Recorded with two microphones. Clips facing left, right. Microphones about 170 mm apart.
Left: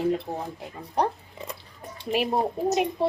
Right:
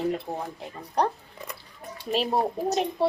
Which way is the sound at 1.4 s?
30° left (ahead or behind).